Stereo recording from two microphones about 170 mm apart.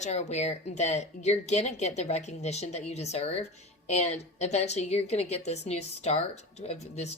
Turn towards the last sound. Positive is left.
turn(degrees=40)  # may be behind; listen again after turning